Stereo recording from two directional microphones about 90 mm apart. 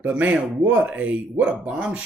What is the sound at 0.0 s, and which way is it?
Speech, 20° right (ahead or behind).